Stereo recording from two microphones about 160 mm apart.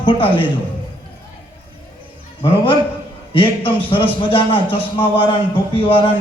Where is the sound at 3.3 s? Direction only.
30° left (ahead or behind).